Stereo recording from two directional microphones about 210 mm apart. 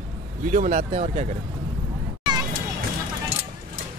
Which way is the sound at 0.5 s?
35° right (ahead or behind).